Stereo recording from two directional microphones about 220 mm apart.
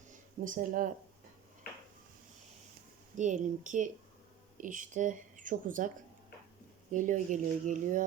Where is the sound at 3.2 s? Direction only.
35° right (ahead or behind).